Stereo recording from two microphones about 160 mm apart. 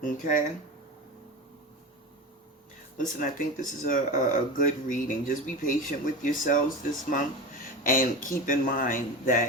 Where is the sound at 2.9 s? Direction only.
55° left (ahead or behind).